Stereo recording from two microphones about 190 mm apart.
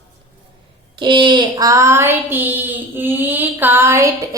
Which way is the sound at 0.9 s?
25° right (ahead or behind).